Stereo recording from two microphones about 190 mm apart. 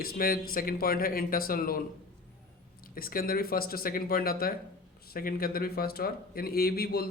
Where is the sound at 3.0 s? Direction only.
50° left (ahead or behind).